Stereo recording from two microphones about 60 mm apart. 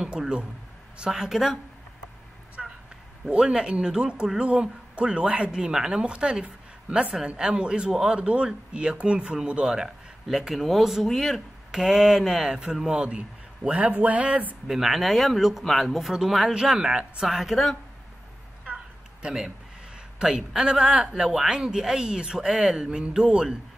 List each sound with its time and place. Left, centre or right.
0.0 s speech: centre
2.6 s a sound: centre
3.3 s speech: centre
14.7 s speech: centre
17.3 s speech: centre
20.2 s speech: centre